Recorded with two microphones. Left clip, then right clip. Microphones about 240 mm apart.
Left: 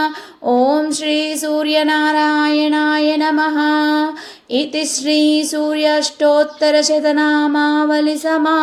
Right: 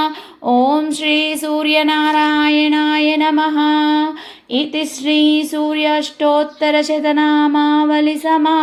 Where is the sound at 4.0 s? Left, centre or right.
Right.